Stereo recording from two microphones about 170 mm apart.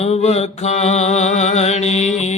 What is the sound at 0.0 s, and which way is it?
Mantra, 40° left (ahead or behind).